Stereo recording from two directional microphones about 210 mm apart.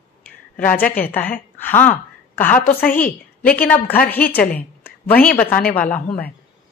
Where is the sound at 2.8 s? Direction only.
40° left (ahead or behind).